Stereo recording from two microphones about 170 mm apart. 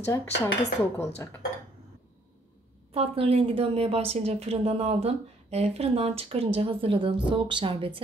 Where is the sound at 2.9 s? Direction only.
35° right (ahead or behind).